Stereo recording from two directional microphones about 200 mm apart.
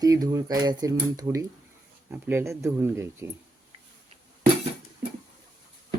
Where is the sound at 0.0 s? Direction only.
15° right (ahead or behind).